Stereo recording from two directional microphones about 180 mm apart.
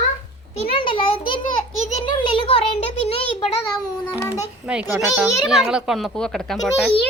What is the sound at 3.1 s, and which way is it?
A child's voice, 30° left (ahead or behind).